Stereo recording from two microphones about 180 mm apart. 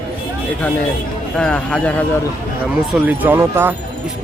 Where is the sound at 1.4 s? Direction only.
5° left (ahead or behind).